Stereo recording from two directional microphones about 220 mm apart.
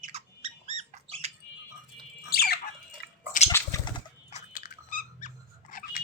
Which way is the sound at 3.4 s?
15° left (ahead or behind).